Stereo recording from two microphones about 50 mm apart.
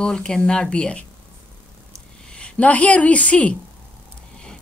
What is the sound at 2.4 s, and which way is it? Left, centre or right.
Speech, left.